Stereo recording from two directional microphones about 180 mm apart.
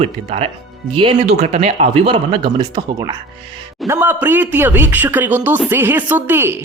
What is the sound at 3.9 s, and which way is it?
Speech, 10° right (ahead or behind).